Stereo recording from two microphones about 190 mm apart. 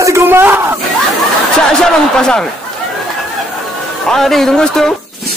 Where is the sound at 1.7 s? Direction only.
5° left (ahead or behind).